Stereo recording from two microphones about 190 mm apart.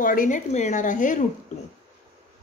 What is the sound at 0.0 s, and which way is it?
A woman's voice, 45° left (ahead or behind).